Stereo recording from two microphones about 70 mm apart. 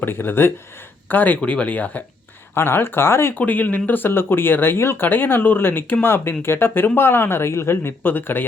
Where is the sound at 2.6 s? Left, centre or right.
Left.